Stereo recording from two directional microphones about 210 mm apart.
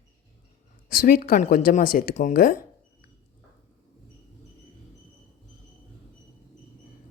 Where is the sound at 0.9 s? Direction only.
40° left (ahead or behind).